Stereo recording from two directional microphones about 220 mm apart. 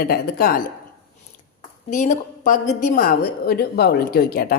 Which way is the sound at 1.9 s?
35° left (ahead or behind).